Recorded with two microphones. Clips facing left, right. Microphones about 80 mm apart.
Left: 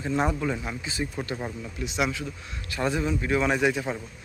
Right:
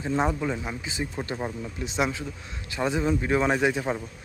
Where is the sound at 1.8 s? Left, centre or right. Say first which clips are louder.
Even; right.